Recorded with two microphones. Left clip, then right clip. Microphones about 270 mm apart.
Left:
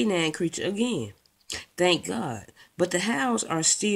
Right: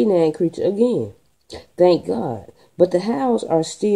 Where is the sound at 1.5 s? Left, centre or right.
Left.